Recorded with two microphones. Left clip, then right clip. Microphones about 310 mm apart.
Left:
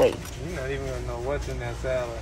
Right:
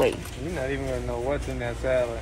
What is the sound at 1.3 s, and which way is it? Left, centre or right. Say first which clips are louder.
Speech: left 1 dB; right.